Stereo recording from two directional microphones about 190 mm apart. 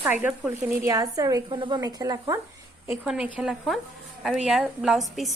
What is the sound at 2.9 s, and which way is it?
Speech, 5° right (ahead or behind).